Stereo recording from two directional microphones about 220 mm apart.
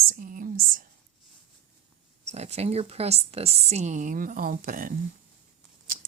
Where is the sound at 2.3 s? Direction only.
30° right (ahead or behind).